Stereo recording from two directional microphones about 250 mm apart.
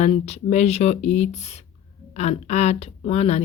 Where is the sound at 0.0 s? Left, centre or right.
Left.